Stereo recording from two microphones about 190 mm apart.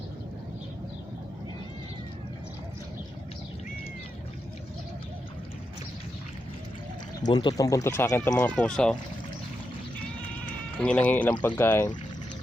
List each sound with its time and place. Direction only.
7.3 s speech: 20° left (ahead or behind); by 9.0 s 5° left (ahead or behind)
10.4 s speech: 5° left (ahead or behind)